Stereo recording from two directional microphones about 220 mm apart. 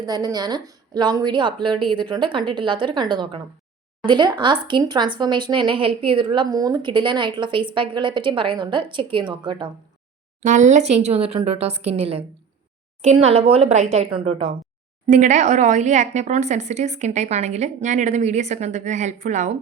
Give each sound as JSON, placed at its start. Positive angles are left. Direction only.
{"t": 0.0, "sound": "a woman's voice", "side_deg": -15}
{"t": 10.4, "sound": "a woman's voice", "side_deg": -35}